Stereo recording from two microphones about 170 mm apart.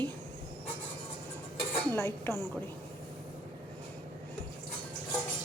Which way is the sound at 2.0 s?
15° left (ahead or behind).